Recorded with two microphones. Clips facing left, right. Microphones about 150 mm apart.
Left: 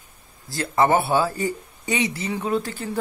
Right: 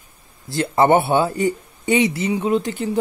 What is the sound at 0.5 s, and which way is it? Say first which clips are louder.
Speech: right 4 dB; 25° right (ahead or behind).